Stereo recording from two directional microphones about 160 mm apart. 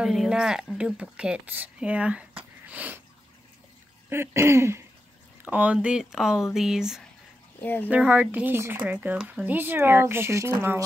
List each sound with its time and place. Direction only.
0.0 s speech: 5° right (ahead or behind)
4.1 s speech: 15° right (ahead or behind)
7.6 s speech: 10° left (ahead or behind)
7.9 s speech: 10° right (ahead or behind)